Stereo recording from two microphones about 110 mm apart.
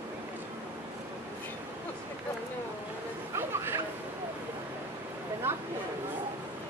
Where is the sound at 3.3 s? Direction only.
25° right (ahead or behind).